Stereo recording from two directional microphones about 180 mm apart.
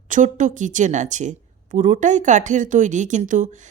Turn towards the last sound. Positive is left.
turn(degrees=-40)  # may be behind; listen again after turning